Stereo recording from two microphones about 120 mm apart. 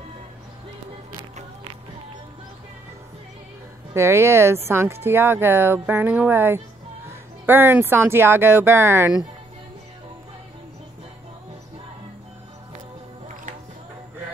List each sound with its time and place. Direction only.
3.9 s speech: 25° right (ahead or behind)